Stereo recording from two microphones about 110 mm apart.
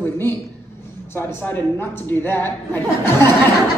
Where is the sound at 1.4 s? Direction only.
20° left (ahead or behind).